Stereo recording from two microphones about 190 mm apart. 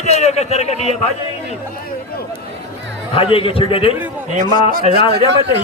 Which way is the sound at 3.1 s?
30° left (ahead or behind).